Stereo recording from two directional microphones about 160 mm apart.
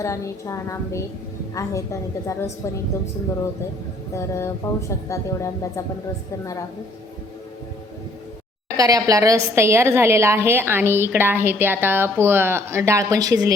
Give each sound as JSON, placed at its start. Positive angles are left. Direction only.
{"t": 0.0, "sound": "a woman's voice", "side_deg": 20}
{"t": 4.1, "sound": "a woman's voice", "side_deg": 20}
{"t": 8.7, "sound": "a woman's voice", "side_deg": -20}